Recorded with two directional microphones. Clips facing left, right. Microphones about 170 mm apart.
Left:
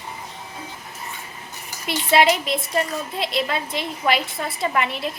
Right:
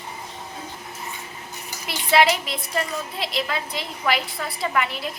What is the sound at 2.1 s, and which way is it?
A woman's voice, 25° left (ahead or behind).